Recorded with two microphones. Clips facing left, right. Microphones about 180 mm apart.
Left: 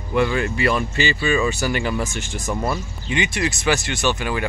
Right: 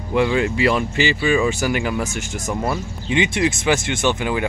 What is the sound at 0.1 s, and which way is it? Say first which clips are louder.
Speech: right 2 dB; 15° right (ahead or behind).